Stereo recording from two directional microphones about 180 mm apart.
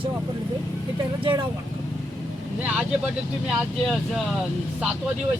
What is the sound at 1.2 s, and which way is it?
Speech, 25° right (ahead or behind).